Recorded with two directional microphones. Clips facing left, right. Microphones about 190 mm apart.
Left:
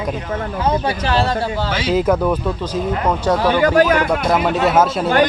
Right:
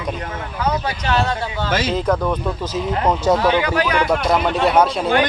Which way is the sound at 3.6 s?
45° left (ahead or behind).